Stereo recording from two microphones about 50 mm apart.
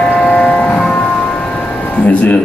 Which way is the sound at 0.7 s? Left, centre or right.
Centre.